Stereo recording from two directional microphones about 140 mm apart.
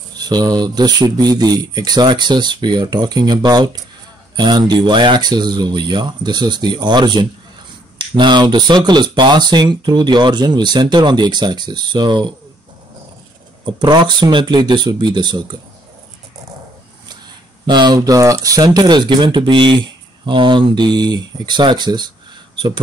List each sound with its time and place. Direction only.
0.2 s speech: 30° right (ahead or behind)
13.7 s speech: 35° right (ahead or behind)
17.6 s speech: 30° right (ahead or behind)